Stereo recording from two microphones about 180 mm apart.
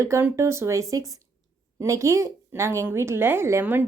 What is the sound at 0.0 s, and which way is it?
A woman's voice, 15° right (ahead or behind).